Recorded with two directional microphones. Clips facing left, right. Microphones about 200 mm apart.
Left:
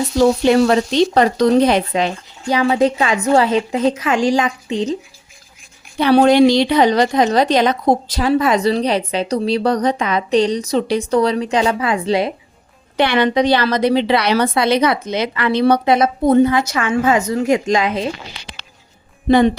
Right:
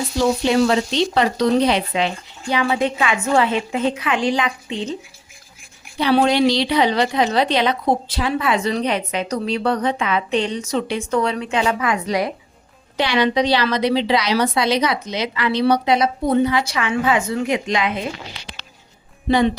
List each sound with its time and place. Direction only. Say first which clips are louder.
0.2 s a woman's voice: left 4 dB; 50° left (ahead or behind)
6.0 s a woman's voice: left 5 dB; 50° left (ahead or behind); by 12.3 s 30° left (ahead or behind)
13.0 s a woman's voice: left 3 dB; 55° left (ahead or behind)